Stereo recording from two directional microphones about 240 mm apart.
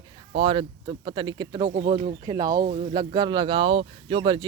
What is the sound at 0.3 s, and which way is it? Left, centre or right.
Speech, right.